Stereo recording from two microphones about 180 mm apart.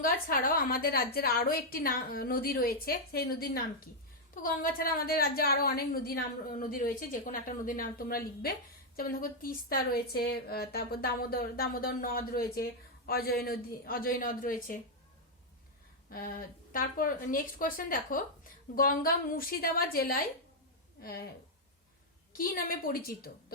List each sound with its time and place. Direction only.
0.0 s a woman's voice: 50° left (ahead or behind)
16.0 s a woman's voice: 55° left (ahead or behind)
22.3 s a woman's voice: 55° left (ahead or behind)